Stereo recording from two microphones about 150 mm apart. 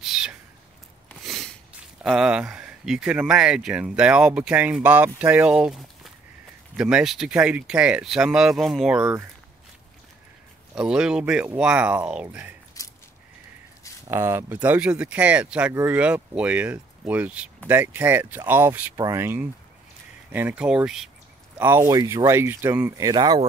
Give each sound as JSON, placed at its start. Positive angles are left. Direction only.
{"t": 0.0, "sound": "a sound", "side_deg": -5}
{"t": 2.0, "sound": "speech", "side_deg": -5}
{"t": 10.7, "sound": "speech", "side_deg": -5}
{"t": 12.8, "sound": "a sound", "side_deg": 25}
{"t": 14.0, "sound": "speech", "side_deg": -15}
{"t": 21.5, "sound": "speech", "side_deg": -15}